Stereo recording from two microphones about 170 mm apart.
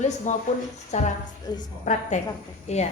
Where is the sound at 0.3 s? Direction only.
45° left (ahead or behind).